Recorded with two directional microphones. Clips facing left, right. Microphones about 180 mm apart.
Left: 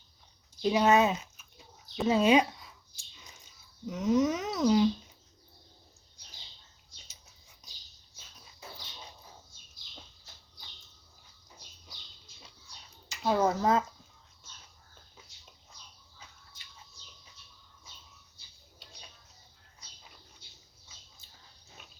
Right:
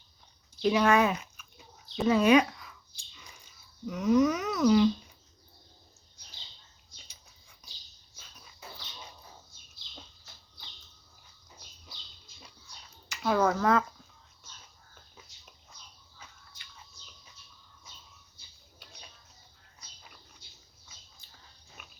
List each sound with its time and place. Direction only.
0.6 s a sound: 25° left (ahead or behind)
2.0 s speech: 25° left (ahead or behind)
3.8 s speech: 25° left (ahead or behind)
13.1 s speech: 25° left (ahead or behind)